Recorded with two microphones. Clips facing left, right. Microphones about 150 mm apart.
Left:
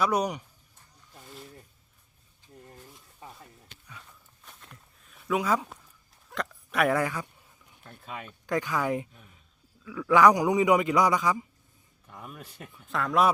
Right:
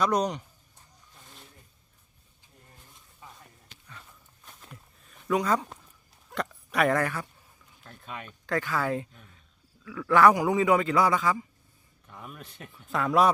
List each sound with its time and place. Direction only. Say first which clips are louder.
0.0 s a man's voice: right 1 dB; 10° left (ahead or behind)
4.4 s a sound: right 2 dB; centre (ahead or behind)
6.3 s speech: right 1 dB; centre (ahead or behind)
7.9 s speech: left 1 dB; centre (ahead or behind)
8.4 s a man's voice: left 1 dB; 15° left (ahead or behind)
12.0 s speech: even; centre (ahead or behind)